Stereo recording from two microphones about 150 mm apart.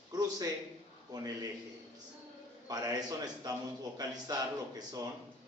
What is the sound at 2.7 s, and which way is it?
Speech, 25° right (ahead or behind).